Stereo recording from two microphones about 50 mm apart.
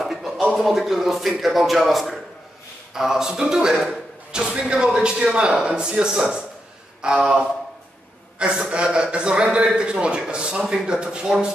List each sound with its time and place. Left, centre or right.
0.0 s a sound: centre
0.5 s a man's voice: centre
8.4 s a man's voice: centre